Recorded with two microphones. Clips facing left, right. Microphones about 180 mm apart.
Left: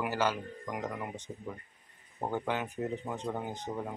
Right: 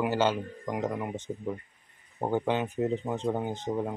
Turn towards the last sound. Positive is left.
turn(degrees=-25)  # may be behind; listen again after turning